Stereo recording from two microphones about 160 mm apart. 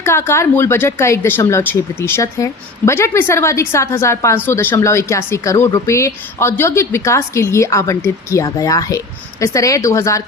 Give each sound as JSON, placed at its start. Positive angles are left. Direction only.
{"t": 0.0, "sound": "speech", "side_deg": 15}